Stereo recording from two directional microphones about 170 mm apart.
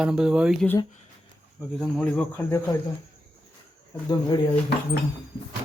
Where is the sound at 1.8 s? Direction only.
5° left (ahead or behind).